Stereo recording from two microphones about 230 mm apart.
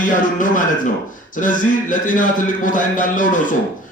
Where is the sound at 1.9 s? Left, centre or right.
Left.